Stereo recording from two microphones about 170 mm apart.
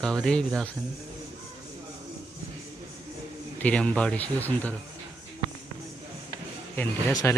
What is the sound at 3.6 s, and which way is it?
Speech, 5° left (ahead or behind).